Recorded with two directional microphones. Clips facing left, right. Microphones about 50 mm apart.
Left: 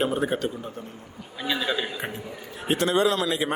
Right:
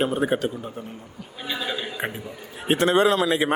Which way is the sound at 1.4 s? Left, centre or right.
Left.